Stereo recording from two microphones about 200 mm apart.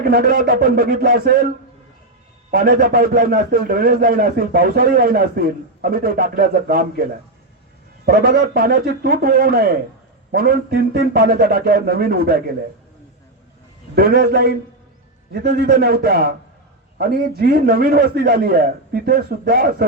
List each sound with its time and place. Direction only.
0.0 s a man's voice: 50° right (ahead or behind)
2.5 s a man's voice: 45° right (ahead or behind)
13.9 s a man's voice: 50° right (ahead or behind)